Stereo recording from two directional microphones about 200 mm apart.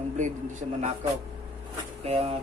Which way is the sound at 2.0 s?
30° right (ahead or behind).